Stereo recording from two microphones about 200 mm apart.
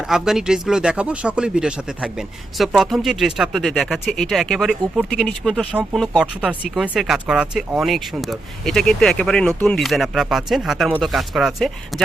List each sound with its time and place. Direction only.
0.0 s speech: centre (ahead or behind)